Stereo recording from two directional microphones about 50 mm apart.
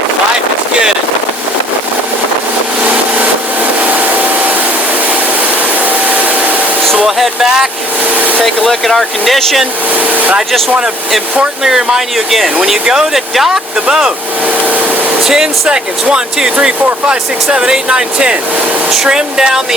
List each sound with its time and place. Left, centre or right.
3.8 s a sound: right
5.8 s vacuum cleaner: right
7.2 s speech: centre
8.1 s vehicle: right
8.4 s speech: centre
10.1 s speech: right
11.6 s speech: centre
14.6 s a sound: right
15.3 s speech: centre